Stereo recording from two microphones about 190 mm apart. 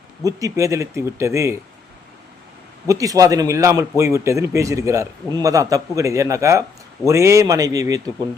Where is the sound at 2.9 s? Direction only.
15° right (ahead or behind).